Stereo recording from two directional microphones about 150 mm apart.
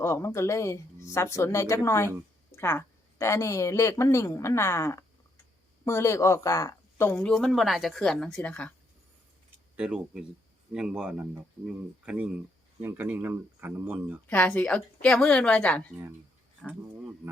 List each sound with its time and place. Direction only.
0.0 s speech: 20° left (ahead or behind)
9.7 s speech: 5° right (ahead or behind)
14.3 s speech: 10° left (ahead or behind)